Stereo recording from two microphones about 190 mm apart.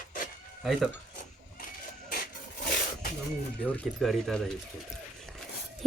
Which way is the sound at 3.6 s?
5° left (ahead or behind).